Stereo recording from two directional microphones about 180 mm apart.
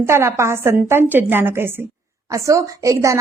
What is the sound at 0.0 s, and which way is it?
A woman's voice, 15° right (ahead or behind).